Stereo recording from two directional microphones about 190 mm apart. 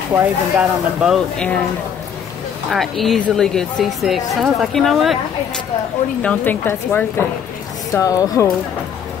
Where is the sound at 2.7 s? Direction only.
Centre (ahead or behind).